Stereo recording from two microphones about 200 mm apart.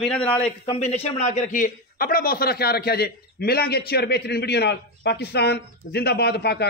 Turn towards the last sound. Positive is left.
turn(degrees=55)  # may be behind; listen again after turning